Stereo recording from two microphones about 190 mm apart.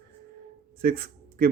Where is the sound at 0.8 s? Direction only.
55° right (ahead or behind).